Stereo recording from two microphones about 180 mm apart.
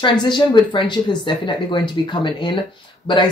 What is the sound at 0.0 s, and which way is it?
Speech, 25° left (ahead or behind).